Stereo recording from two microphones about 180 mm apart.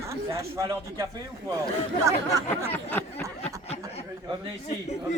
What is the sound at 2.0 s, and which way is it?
Speech, 15° right (ahead or behind).